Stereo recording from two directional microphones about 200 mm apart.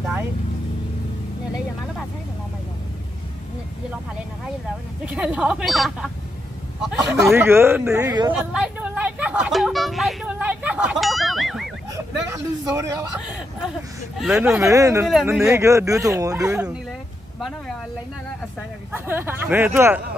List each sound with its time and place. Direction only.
0.0 s vehicle: 10° right (ahead or behind)
5.0 s speech: 5° right (ahead or behind)
7.0 s speech: 15° right (ahead or behind)
8.3 s speech: 5° right (ahead or behind)
11.9 s speech: 15° right (ahead or behind)
14.2 s speech: centre (ahead or behind)
14.5 s speech: 15° right (ahead or behind)
18.9 s speech: 10° right (ahead or behind)